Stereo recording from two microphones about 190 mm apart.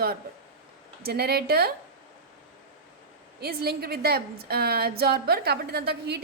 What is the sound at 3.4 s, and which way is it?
A woman's voice, 55° right (ahead or behind).